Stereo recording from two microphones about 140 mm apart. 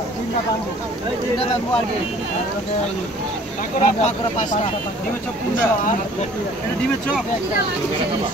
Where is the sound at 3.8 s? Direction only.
65° left (ahead or behind).